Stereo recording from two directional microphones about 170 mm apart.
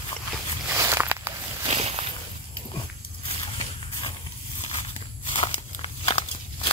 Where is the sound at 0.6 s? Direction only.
15° right (ahead or behind).